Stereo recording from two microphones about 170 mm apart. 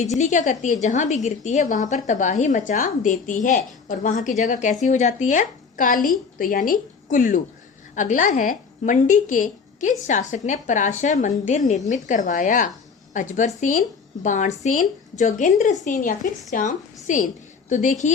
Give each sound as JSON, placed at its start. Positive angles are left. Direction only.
{"t": 0.0, "sound": "a woman's voice", "side_deg": 40}